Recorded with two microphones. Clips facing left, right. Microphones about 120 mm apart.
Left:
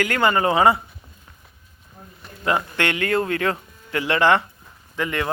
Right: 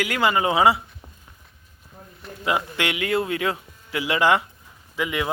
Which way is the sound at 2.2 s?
5° right (ahead or behind).